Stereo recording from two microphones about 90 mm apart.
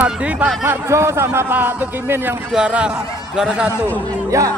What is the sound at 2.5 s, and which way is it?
Speech, 10° right (ahead or behind).